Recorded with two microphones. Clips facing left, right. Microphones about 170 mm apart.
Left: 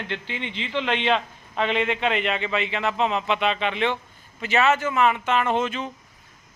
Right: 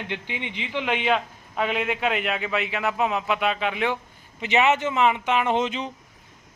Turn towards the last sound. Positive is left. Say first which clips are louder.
# even
turn(degrees=-20)  # may be behind; listen again after turning